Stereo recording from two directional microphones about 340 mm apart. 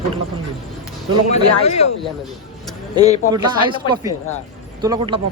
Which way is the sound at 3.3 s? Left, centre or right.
Centre.